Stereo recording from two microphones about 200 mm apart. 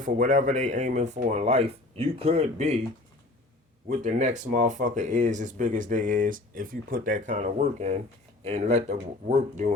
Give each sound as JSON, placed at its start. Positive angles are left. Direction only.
{"t": 0.0, "sound": "speech", "side_deg": -40}
{"t": 3.8, "sound": "speech", "side_deg": -40}